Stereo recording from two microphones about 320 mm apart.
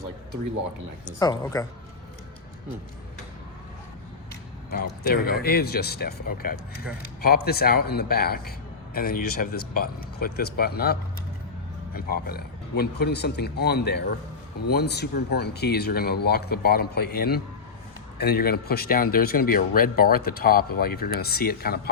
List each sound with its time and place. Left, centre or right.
1.2 s a woman's voice: centre
4.7 s speech: left
11.9 s speech: left